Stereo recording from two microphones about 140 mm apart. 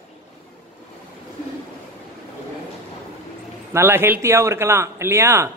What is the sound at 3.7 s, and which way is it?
A man's voice, 15° right (ahead or behind).